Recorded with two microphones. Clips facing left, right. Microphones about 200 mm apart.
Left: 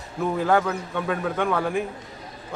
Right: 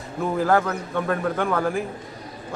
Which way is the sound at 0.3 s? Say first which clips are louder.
Right 1 dB; centre (ahead or behind).